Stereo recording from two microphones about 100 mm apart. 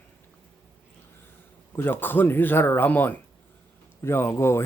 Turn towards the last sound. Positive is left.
turn(degrees=25)  # may be behind; listen again after turning